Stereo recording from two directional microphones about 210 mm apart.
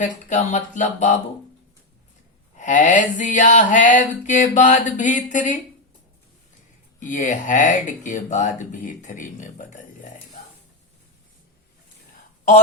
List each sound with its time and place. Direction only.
0.3 s speech: 35° left (ahead or behind)
2.6 s speech: 35° left (ahead or behind)
7.0 s speech: 35° left (ahead or behind)